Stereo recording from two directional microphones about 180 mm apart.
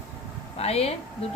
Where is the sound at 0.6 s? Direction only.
35° left (ahead or behind).